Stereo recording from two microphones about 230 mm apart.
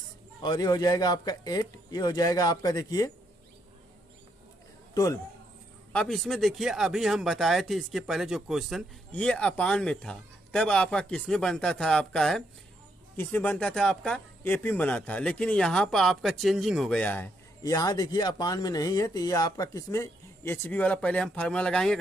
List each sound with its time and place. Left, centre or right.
0.4 s speech: centre
4.9 s a man's voice: centre
5.9 s speech: centre